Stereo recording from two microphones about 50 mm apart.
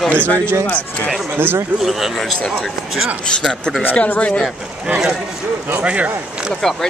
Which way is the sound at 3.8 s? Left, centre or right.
Left.